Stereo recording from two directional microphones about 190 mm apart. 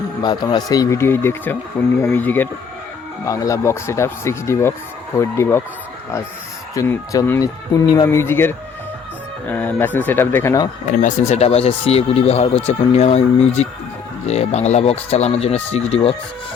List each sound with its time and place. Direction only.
0.2 s speech: 20° left (ahead or behind)
6.7 s speech: 15° left (ahead or behind)
11.0 s speech: 35° left (ahead or behind)